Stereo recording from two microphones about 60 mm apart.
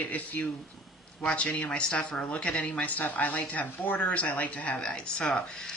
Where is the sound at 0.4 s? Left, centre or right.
Left.